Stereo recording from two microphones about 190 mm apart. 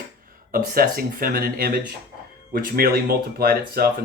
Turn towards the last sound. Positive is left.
turn(degrees=-50)  # may be behind; listen again after turning